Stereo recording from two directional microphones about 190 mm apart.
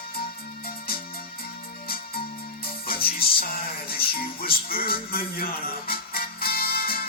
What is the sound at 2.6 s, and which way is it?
Music, 50° left (ahead or behind).